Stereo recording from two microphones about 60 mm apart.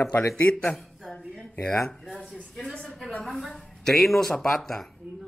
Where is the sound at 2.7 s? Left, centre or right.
Centre.